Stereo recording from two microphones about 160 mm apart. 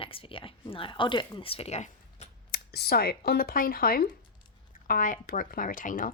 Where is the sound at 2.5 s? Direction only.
80° left; by 6.1 s 60° left (ahead or behind).